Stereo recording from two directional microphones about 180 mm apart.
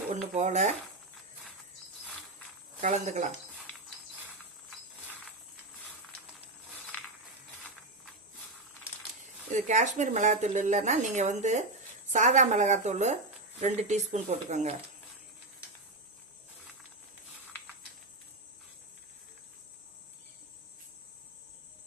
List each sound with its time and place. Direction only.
0.3 s speech: 40° right (ahead or behind)
2.8 s speech: 40° right (ahead or behind)
9.5 s speech: 40° right (ahead or behind)